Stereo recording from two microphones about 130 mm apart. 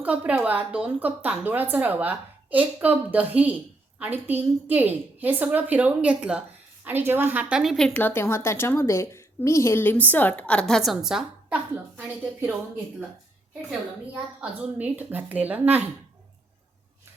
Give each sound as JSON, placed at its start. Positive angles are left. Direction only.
{"t": 0.0, "sound": "a woman's voice", "side_deg": -10}
{"t": 7.5, "sound": "a woman's voice", "side_deg": 0}
{"t": 7.9, "sound": "a woman's voice", "side_deg": 15}
{"t": 14.8, "sound": "a woman's voice", "side_deg": -10}